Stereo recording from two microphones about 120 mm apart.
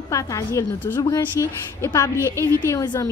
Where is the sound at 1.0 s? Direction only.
30° left (ahead or behind).